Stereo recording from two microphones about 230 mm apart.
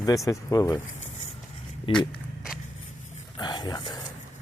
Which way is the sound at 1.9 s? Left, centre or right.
Left.